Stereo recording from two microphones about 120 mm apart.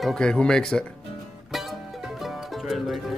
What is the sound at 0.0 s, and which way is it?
Speech, 5° left (ahead or behind).